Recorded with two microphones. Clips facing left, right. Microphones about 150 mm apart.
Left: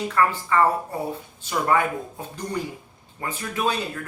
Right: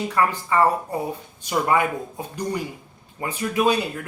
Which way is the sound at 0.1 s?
15° right (ahead or behind).